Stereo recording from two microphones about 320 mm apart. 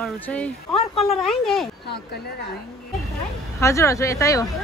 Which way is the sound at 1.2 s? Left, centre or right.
Centre.